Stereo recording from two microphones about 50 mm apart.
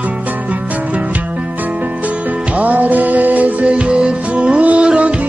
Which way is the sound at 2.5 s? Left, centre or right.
Right.